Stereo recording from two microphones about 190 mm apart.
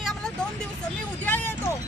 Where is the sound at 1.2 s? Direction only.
10° left (ahead or behind).